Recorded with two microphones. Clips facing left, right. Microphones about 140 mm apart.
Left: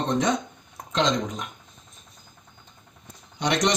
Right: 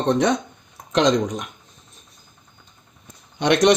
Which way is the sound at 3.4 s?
65° right (ahead or behind).